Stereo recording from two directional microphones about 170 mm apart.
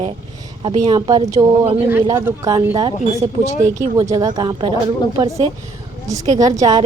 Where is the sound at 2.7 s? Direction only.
30° right (ahead or behind).